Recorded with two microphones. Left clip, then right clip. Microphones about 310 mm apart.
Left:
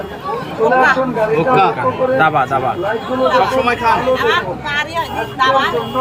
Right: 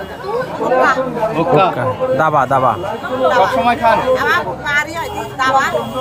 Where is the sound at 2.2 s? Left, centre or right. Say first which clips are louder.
Right 4 dB; centre.